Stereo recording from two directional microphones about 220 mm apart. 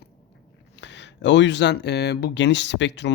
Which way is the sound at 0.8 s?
55° left (ahead or behind).